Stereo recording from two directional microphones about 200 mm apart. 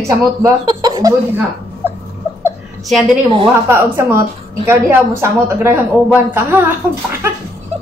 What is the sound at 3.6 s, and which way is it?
A woman's voice, 10° right (ahead or behind).